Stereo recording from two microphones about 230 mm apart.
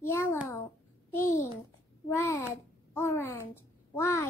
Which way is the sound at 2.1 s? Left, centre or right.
Centre.